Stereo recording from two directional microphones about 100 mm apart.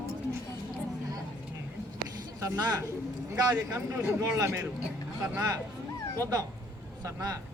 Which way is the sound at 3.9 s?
30° right (ahead or behind).